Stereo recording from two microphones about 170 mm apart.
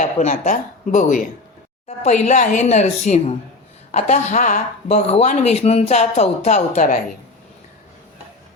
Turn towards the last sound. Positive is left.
turn(degrees=45)  # may be behind; listen again after turning